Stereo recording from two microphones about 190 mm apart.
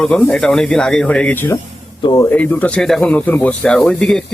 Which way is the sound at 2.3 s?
10° left (ahead or behind).